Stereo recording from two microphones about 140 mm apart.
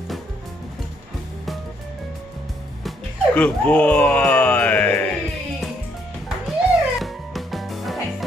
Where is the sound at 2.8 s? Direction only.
10° left (ahead or behind).